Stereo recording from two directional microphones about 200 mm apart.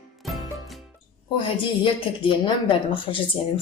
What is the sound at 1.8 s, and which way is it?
Speech, 25° left (ahead or behind).